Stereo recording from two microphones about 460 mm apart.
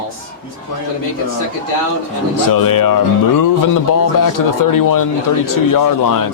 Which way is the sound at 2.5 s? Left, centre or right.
Left.